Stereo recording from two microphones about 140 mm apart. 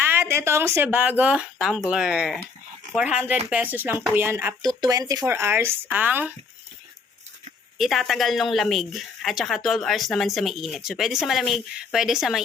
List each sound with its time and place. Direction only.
0.0 s speech: 15° right (ahead or behind)
4.6 s speech: 30° right (ahead or behind); by 6.3 s 15° right (ahead or behind)
7.8 s speech: centre (ahead or behind)